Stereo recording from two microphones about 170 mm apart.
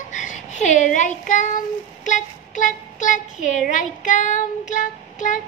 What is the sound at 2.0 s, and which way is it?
Child singing, 45° left (ahead or behind).